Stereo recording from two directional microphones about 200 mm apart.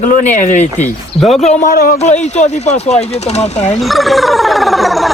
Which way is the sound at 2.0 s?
35° left (ahead or behind).